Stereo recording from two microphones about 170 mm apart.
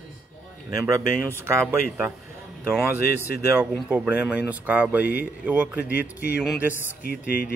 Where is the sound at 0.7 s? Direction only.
20° right (ahead or behind).